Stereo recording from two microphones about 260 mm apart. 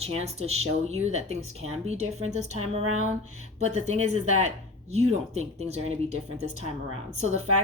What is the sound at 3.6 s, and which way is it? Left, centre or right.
Speech, right.